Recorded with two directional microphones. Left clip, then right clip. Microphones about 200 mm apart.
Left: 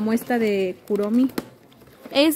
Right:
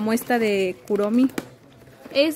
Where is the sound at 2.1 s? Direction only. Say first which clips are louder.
Left 1 dB; 50° left (ahead or behind).